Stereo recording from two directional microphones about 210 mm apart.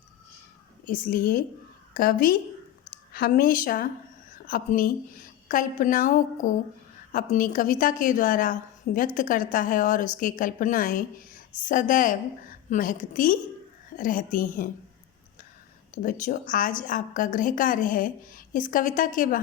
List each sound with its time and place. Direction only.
0.9 s a woman's voice: 40° left (ahead or behind)
16.0 s a woman's voice: 40° left (ahead or behind)